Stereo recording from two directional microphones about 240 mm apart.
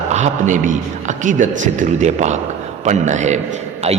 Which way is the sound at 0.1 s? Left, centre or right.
Right.